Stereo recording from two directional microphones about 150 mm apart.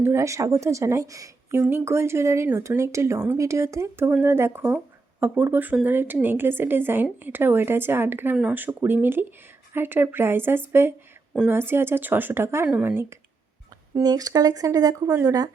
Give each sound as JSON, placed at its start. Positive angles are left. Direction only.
{"t": 0.0, "sound": "a woman's voice", "side_deg": -20}
{"t": 13.9, "sound": "speech", "side_deg": -25}